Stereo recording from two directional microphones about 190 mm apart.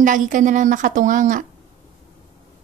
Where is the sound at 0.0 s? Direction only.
45° right (ahead or behind).